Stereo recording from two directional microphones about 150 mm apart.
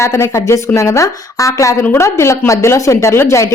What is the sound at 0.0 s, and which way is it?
A woman's voice, 20° left (ahead or behind).